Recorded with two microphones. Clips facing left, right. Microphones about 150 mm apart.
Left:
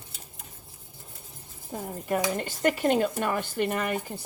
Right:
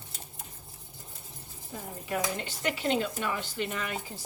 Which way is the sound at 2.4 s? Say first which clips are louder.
Left 7 dB; 50° left (ahead or behind).